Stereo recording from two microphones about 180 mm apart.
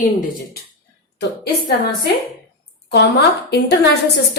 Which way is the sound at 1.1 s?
65° left (ahead or behind).